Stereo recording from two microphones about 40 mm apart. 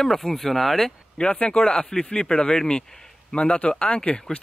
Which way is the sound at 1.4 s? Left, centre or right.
Left.